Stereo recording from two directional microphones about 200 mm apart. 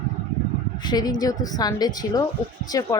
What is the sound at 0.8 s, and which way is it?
Speech, 20° left (ahead or behind).